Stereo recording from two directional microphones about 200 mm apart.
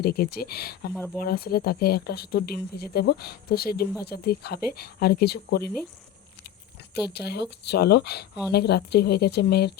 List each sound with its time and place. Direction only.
0.0 s speech: 50° left (ahead or behind)
0.9 s speech: 10° left (ahead or behind)
1.2 s speech: 50° left (ahead or behind)
7.1 s speech: 55° left (ahead or behind)